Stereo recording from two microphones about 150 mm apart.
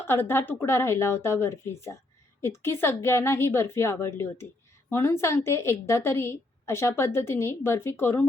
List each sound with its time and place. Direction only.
0.0 s a woman's voice: 15° left (ahead or behind)